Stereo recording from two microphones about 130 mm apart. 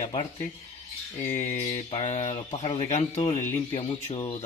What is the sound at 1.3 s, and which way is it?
Speech, 60° left (ahead or behind).